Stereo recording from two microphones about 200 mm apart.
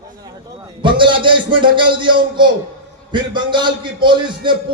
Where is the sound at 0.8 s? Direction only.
25° right (ahead or behind).